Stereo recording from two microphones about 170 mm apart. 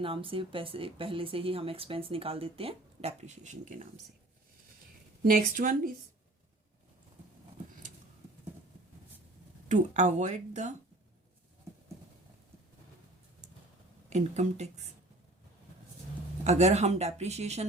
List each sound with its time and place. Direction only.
0.0 s speech: 30° right (ahead or behind); by 3.8 s 45° right (ahead or behind)
5.4 s speech: 55° right (ahead or behind)
9.6 s speech: 45° right (ahead or behind)
14.1 s speech: 40° right (ahead or behind)
16.4 s speech: 40° right (ahead or behind)